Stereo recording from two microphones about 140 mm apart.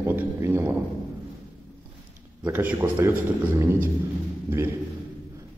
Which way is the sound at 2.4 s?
15° right (ahead or behind).